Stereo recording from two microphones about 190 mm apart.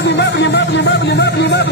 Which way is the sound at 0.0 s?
65° left (ahead or behind).